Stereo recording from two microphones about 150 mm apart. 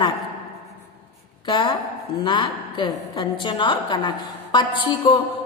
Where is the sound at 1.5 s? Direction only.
30° left (ahead or behind).